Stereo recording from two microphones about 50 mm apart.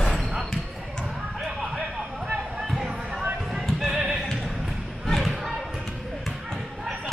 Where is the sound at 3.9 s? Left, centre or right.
Centre.